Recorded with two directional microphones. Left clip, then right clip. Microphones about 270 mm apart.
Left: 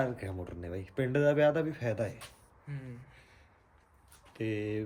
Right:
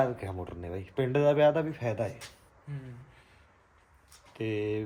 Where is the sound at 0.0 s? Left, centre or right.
Centre.